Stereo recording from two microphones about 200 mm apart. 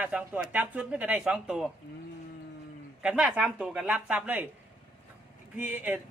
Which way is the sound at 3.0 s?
5° right (ahead or behind).